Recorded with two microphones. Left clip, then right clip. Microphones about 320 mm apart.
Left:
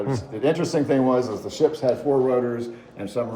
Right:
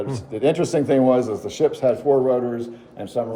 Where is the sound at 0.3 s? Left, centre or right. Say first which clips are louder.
Right 3 dB; right.